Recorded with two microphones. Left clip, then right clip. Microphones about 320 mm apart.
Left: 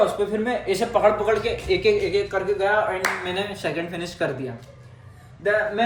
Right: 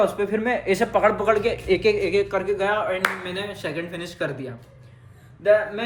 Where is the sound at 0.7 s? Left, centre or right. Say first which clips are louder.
Left 1 dB; right.